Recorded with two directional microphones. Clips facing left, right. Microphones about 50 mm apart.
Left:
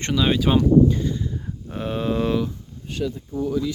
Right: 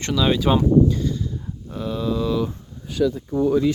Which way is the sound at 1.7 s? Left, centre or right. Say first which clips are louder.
Even; left.